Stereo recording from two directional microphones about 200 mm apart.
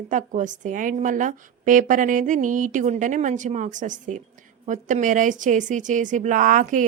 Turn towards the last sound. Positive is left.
turn(degrees=-40)  # may be behind; listen again after turning